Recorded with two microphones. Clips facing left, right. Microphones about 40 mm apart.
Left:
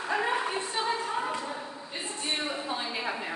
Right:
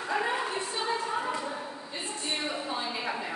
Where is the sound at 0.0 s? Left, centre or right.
Centre.